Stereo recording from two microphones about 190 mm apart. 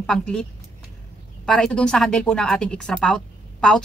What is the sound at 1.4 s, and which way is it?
Speech, 5° left (ahead or behind).